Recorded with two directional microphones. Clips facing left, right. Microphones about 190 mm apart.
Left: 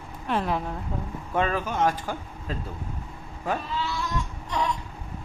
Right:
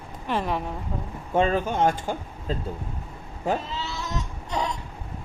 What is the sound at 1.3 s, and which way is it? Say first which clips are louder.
Speech: right 3 dB; 25° right (ahead or behind).